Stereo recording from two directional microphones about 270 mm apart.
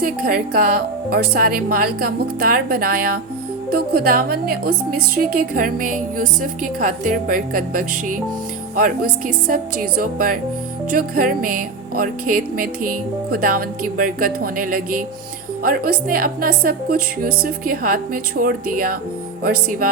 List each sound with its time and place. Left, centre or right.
0.0 s music: right
8.7 s speech: right
9.5 s music: right